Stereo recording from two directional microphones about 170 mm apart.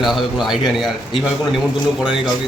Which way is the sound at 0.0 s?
Centre (ahead or behind).